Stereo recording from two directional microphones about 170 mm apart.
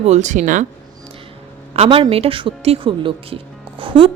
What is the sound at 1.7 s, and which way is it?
Speech, 35° right (ahead or behind).